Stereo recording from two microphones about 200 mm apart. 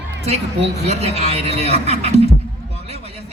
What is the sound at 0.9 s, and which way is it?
Speech, 30° right (ahead or behind).